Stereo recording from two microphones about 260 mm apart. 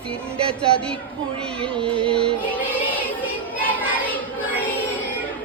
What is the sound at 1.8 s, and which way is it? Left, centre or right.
Music, centre.